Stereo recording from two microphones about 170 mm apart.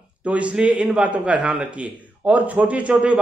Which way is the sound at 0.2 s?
10° right (ahead or behind).